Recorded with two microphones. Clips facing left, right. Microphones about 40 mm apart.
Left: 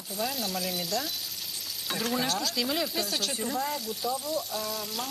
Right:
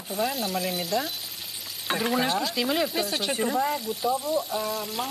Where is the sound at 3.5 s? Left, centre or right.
Centre.